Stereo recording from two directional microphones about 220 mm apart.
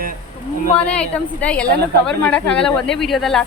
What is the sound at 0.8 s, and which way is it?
A woman's voice, 5° left (ahead or behind).